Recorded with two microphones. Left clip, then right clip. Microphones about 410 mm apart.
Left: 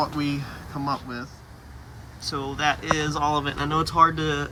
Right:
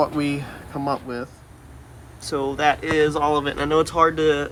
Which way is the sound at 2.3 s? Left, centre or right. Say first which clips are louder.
Right 5 dB; centre.